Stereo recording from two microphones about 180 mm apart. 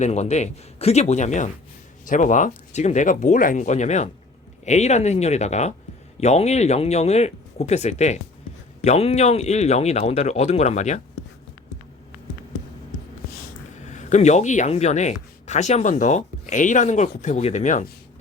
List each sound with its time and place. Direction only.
0.0 s speech: 40° left (ahead or behind)
13.8 s speech: 40° left (ahead or behind)